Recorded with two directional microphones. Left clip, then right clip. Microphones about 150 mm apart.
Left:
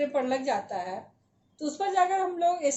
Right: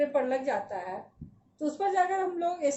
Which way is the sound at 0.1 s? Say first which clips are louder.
Left 1 dB; 30° left (ahead or behind).